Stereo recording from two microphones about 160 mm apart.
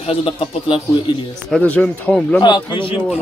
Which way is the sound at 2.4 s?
25° left (ahead or behind).